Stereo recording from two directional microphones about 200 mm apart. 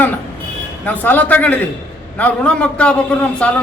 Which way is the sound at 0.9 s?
10° left (ahead or behind).